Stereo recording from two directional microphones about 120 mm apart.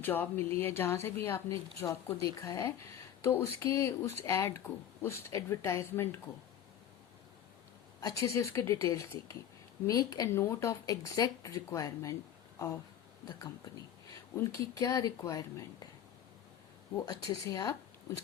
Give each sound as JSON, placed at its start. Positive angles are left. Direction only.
{"t": 0.0, "sound": "speech", "side_deg": 15}
{"t": 8.0, "sound": "speech", "side_deg": 25}
{"t": 17.1, "sound": "speech", "side_deg": 30}